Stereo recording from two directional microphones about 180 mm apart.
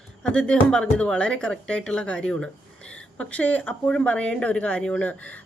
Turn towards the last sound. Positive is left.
turn(degrees=10)  # may be behind; listen again after turning